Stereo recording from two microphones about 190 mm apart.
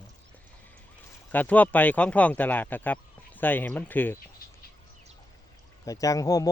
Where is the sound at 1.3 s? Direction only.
10° left (ahead or behind).